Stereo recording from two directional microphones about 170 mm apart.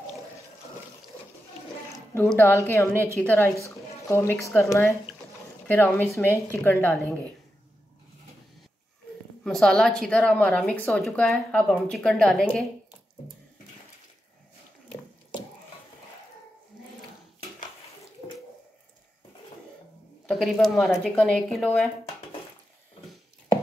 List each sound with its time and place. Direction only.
2.3 s a woman's voice: 15° left (ahead or behind)
9.4 s a woman's voice: 5° left (ahead or behind)
20.2 s a woman's voice: 5° left (ahead or behind)